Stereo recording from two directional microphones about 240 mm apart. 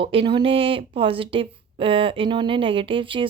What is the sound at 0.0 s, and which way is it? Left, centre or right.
Speech, right.